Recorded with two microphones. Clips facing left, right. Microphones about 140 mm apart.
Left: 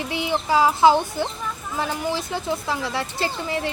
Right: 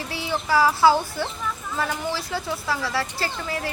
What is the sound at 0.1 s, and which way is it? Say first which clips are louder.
Speech: left 1 dB; 20° left (ahead or behind).